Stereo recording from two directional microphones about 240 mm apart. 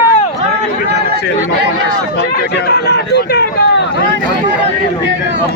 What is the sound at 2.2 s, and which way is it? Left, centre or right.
Speech, left.